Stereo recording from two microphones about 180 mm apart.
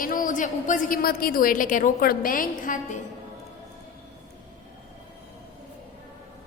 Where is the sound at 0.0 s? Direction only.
50° left (ahead or behind).